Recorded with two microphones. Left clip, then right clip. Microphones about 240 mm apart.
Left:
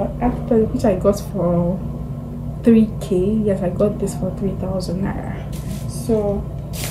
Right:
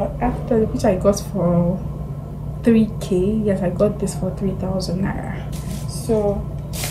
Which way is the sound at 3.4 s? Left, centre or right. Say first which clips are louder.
Even; centre.